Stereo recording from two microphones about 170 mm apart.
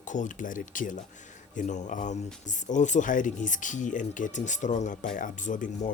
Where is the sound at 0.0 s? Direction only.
45° left (ahead or behind).